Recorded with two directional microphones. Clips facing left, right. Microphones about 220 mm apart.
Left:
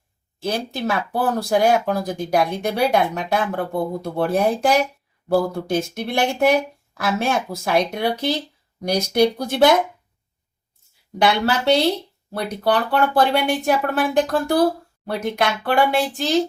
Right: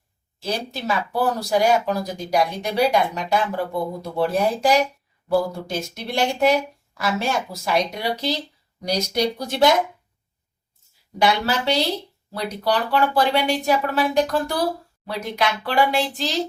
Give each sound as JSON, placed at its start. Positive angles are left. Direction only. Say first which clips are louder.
{"t": 0.3, "sound": "speech", "louder": "left 3 dB", "side_deg": 55}
{"t": 11.2, "sound": "speech", "louder": "left 2 dB", "side_deg": 60}